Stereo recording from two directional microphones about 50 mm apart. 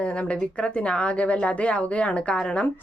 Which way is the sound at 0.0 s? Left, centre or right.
Left.